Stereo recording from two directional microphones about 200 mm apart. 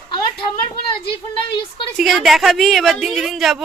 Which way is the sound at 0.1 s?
20° left (ahead or behind).